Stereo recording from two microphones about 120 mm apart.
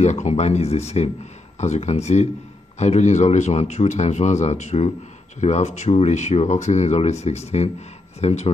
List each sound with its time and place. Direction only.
0.0 s speech: 75° left (ahead or behind)